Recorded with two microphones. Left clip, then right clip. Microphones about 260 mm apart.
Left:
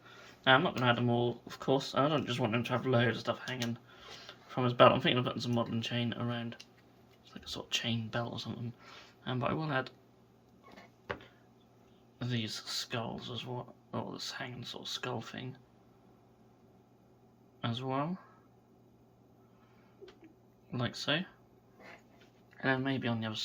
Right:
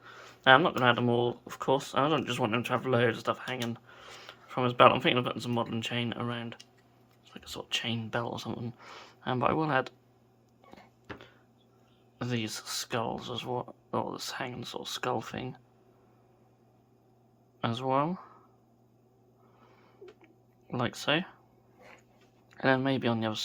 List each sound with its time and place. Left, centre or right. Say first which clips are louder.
0.0 s speech: right 6 dB; centre
12.2 s speech: right 4 dB; centre
17.6 s speech: right 7 dB; centre
20.7 s speech: right 5 dB; centre
22.5 s speech: right 6 dB; right